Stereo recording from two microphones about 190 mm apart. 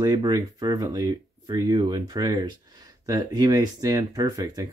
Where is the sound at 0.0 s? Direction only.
20° right (ahead or behind).